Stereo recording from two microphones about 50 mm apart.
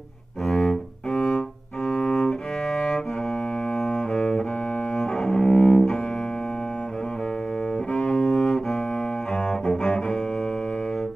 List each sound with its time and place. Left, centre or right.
0.5 s cello: centre
3.8 s double bass: centre
4.9 s cello: centre
7.9 s cello: left
8.2 s bowed string instrument: centre
9.5 s cello: centre